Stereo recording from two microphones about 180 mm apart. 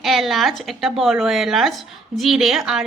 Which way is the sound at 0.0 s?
Centre (ahead or behind).